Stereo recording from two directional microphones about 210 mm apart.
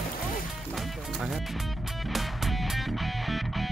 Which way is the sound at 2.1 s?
Centre (ahead or behind).